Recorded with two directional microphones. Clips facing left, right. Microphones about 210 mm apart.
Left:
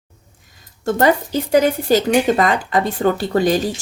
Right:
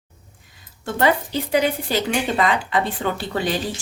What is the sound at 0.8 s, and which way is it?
Speech, 45° left (ahead or behind).